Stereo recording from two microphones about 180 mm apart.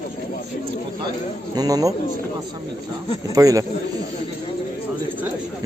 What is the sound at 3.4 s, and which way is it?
Speech, 20° right (ahead or behind).